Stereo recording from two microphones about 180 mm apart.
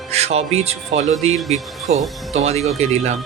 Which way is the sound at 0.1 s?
35° right (ahead or behind).